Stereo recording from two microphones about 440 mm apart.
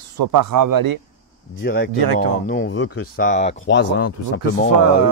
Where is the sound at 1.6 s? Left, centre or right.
Left.